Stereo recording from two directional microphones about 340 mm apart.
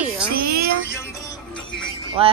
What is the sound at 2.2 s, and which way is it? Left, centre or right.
Speech, centre.